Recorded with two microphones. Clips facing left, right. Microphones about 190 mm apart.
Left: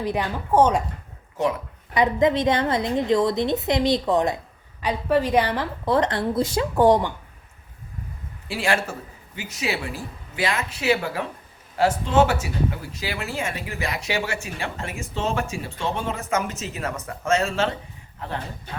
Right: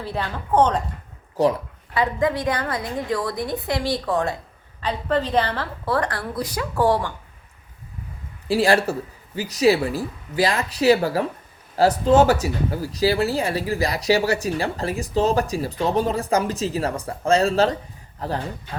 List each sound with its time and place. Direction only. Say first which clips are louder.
0.0 s speech: left 3 dB; 15° left (ahead or behind)
1.4 s speech: right 4 dB; 35° right (ahead or behind)
1.9 s a woman's voice: left 2 dB; 20° left (ahead or behind)
8.4 s speech: right 6 dB; 35° right (ahead or behind)